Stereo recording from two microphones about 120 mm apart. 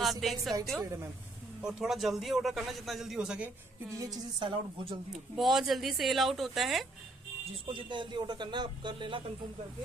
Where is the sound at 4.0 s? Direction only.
35° right (ahead or behind).